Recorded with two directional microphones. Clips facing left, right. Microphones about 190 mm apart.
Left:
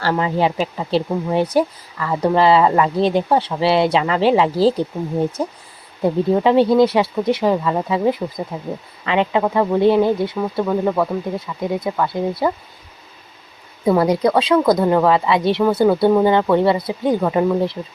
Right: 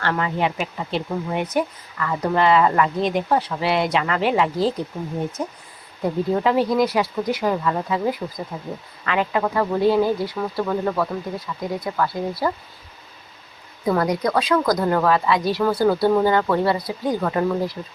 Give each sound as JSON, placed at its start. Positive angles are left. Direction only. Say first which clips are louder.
{"t": 0.0, "sound": "a woman's voice", "louder": "left 4 dB", "side_deg": 30}
{"t": 13.8, "sound": "a woman's voice", "louder": "left 5 dB", "side_deg": 25}